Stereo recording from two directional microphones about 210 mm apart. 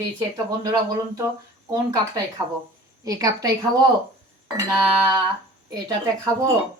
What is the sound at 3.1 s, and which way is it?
Speech, 15° right (ahead or behind).